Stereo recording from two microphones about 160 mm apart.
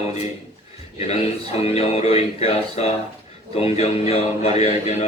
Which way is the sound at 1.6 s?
40° left (ahead or behind).